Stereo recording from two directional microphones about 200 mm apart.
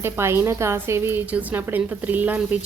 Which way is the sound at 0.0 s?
10° right (ahead or behind).